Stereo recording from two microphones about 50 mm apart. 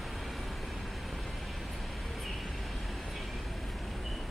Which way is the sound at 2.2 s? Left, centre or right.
Centre.